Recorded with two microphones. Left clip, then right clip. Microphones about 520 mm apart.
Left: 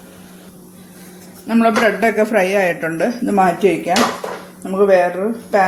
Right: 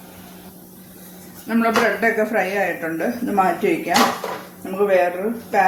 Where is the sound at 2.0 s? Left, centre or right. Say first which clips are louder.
Left 4 dB; centre.